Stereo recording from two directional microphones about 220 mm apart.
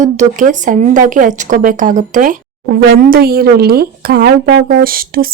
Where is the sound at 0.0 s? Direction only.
35° right (ahead or behind).